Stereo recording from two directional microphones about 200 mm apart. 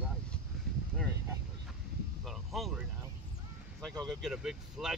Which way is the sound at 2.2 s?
Centre (ahead or behind).